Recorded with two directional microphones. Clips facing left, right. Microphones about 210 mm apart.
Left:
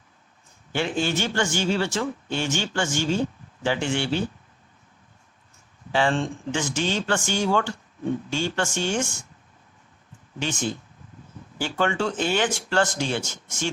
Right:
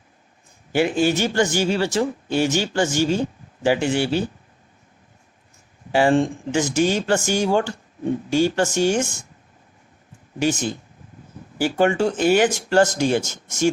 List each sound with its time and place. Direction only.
0.7 s speech: 10° right (ahead or behind)
1.1 s speech: 40° right (ahead or behind)
2.0 s speech: 10° right (ahead or behind)
2.5 s speech: 40° right (ahead or behind)
3.6 s speech: 10° right (ahead or behind)
3.9 s speech: 40° right (ahead or behind)
6.0 s speech: 40° right (ahead or behind)
10.5 s speech: 40° right (ahead or behind)
11.5 s speech: 10° right (ahead or behind)
12.4 s speech: 40° right (ahead or behind)